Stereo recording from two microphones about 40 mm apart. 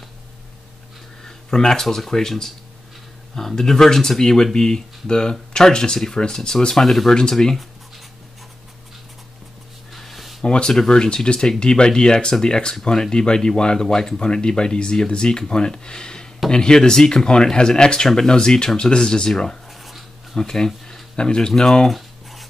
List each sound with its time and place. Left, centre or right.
1.2 s speech: centre
9.9 s a sound: centre
10.4 s speech: left
10.7 s speech: centre
11.0 s speech: left
19.7 s dog: centre
20.3 s speech: centre
21.8 s a sound: centre